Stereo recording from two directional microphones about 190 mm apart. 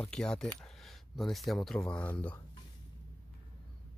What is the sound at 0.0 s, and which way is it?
Speech, 5° left (ahead or behind).